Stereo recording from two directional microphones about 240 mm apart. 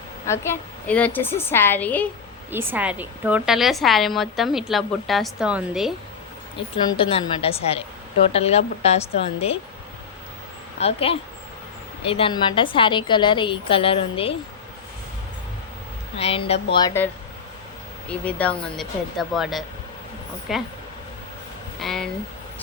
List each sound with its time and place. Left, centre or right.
0.3 s a woman's voice: centre
2.5 s a woman's voice: centre
6.6 s a woman's voice: left
10.8 s a woman's voice: left
16.1 s a woman's voice: left
16.7 s a woman's voice: centre
18.3 s a woman's voice: centre
21.8 s a woman's voice: centre